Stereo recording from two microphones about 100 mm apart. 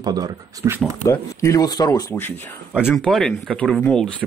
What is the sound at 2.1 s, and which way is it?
Speech, 20° left (ahead or behind).